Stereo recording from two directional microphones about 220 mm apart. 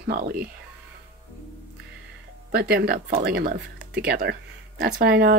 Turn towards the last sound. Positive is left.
turn(degrees=-45)  # may be behind; listen again after turning